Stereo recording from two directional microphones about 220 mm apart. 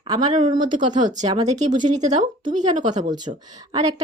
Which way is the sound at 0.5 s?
20° right (ahead or behind).